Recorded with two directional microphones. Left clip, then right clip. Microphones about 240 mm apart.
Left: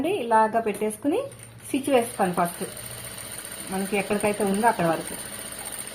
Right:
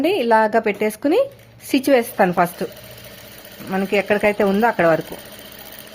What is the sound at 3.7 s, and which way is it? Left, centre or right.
Speech, right.